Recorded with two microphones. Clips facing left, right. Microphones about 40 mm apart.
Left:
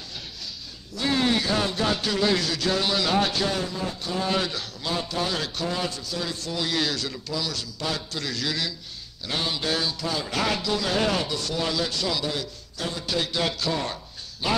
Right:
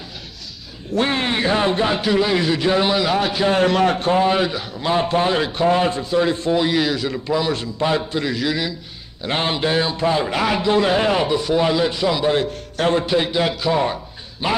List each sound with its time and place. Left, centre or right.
0.9 s a man's voice: right; by 3.4 s centre
3.6 s a man's voice: right
4.0 s a man's voice: right
4.3 s a man's voice: right
4.9 s a man's voice: right; by 8.7 s centre
9.2 s a man's voice: right
12.3 s a man's voice: right
13.0 s a man's voice: right